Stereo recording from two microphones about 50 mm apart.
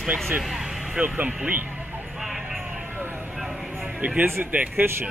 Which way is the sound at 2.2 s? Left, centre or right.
Centre.